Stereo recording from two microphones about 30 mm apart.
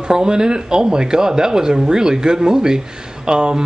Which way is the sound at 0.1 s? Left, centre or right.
Right.